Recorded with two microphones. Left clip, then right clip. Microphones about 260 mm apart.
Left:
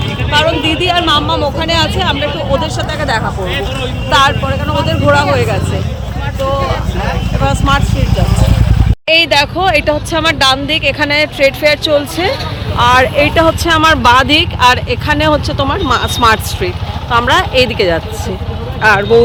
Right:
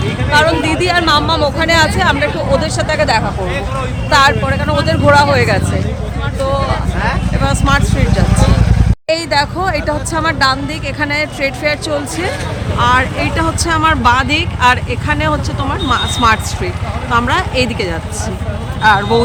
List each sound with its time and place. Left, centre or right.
0.3 s speech: centre
7.7 s speech: centre
9.0 s speech: centre